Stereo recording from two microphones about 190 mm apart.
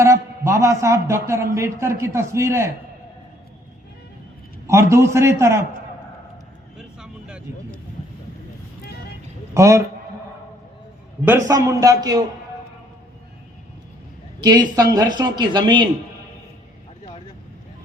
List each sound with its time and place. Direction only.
0.0 s a man's voice: 15° right (ahead or behind)
4.6 s a man's voice: 15° right (ahead or behind)
6.7 s a sound: 5° right (ahead or behind)
9.6 s a man's voice: 15° right (ahead or behind)
11.3 s a man's voice: 15° right (ahead or behind)
14.8 s speech: 20° right (ahead or behind)